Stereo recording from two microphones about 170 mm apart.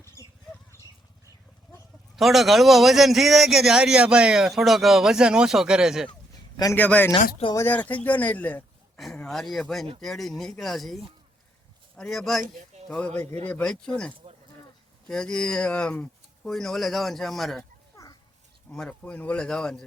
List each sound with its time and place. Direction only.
2.1 s a man's voice: centre (ahead or behind)
6.6 s a man's voice: 15° left (ahead or behind)
17.9 s a sound: 20° left (ahead or behind)
18.7 s a man's voice: 5° left (ahead or behind)